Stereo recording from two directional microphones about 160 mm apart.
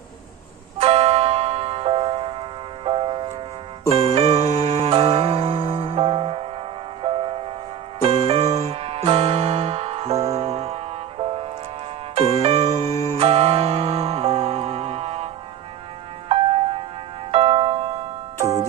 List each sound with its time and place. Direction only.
0.7 s music: 40° right (ahead or behind)
16.3 s music: 35° right (ahead or behind)